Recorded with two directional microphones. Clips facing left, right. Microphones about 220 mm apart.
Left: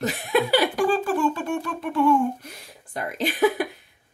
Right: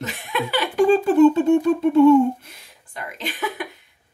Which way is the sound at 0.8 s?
25° right (ahead or behind).